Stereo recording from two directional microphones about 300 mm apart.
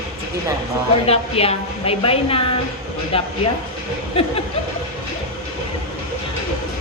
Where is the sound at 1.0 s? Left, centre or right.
Centre.